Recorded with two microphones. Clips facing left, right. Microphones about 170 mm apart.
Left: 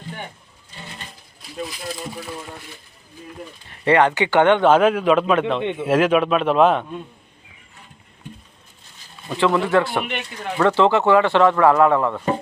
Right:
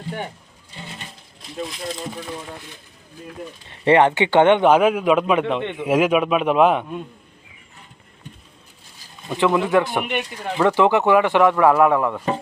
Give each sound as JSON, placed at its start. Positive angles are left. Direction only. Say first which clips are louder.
{"t": 1.6, "sound": "speech", "louder": "right 1 dB", "side_deg": 5}
{"t": 3.7, "sound": "speech", "louder": "right 1 dB", "side_deg": -20}
{"t": 9.3, "sound": "speech", "louder": "even", "side_deg": -20}